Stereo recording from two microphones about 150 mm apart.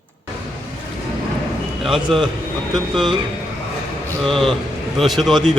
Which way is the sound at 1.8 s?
Centre (ahead or behind).